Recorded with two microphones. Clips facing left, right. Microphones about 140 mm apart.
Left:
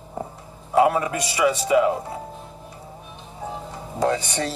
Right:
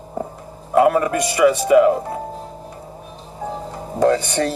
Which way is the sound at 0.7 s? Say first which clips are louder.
Right 4 dB; 55° right (ahead or behind).